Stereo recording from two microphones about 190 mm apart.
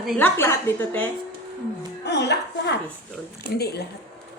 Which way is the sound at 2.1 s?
60° left (ahead or behind).